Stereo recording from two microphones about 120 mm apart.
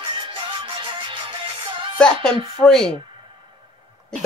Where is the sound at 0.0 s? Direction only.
45° right (ahead or behind).